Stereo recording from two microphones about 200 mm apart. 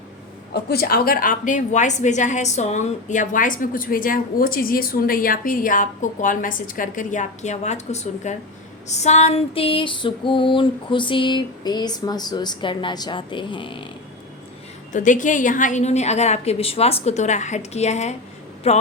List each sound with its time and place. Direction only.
0.5 s a woman's voice: 50° left (ahead or behind); by 8.4 s 35° left (ahead or behind)
8.9 s female singing: 35° left (ahead or behind)
14.9 s a woman's voice: 40° left (ahead or behind)